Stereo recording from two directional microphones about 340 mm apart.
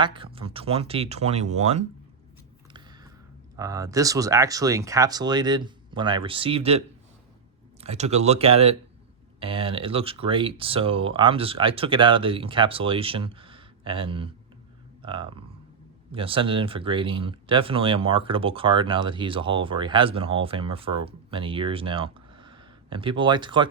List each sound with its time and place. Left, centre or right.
0.0 s speech: centre
3.5 s speech: centre